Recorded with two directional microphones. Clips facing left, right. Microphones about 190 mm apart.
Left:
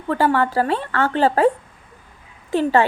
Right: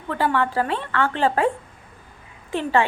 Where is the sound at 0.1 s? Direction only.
40° left (ahead or behind).